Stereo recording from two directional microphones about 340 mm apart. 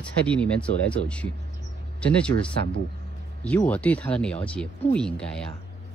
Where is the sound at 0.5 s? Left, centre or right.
Centre.